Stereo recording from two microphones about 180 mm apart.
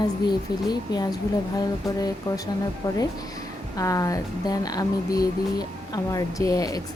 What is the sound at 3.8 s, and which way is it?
Speech, 20° left (ahead or behind).